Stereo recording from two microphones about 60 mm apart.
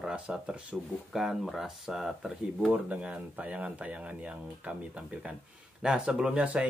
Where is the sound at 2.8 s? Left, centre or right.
Centre.